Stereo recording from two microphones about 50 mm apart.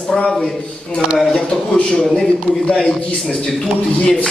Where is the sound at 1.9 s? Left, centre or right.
Centre.